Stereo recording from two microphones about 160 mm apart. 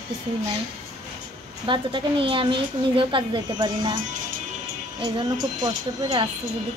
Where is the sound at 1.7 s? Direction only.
30° right (ahead or behind).